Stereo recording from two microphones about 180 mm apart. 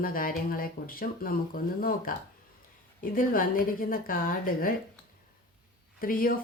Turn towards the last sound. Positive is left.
turn(degrees=55)  # may be behind; listen again after turning